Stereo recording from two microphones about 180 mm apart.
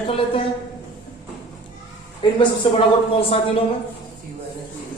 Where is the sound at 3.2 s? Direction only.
30° left (ahead or behind).